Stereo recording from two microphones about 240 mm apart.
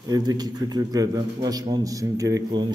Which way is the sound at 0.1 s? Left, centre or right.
Centre.